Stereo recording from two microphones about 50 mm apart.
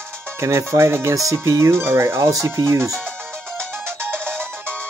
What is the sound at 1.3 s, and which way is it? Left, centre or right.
Speech, right.